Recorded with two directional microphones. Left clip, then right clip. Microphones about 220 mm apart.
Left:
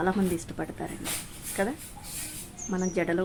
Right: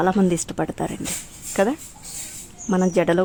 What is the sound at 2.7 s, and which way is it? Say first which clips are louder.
Speech: right 9 dB; 40° right (ahead or behind).